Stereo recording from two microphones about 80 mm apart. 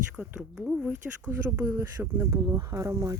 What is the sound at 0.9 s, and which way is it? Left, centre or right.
Speech, right.